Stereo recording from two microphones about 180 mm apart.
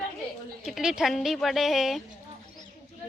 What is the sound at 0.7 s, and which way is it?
Speech, 5° right (ahead or behind).